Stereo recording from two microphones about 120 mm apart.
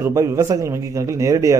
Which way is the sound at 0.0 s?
25° right (ahead or behind).